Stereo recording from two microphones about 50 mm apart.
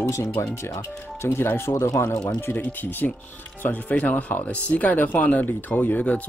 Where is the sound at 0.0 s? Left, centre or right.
Left.